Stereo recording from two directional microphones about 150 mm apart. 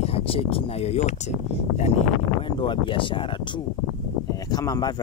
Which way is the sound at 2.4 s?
35° left (ahead or behind).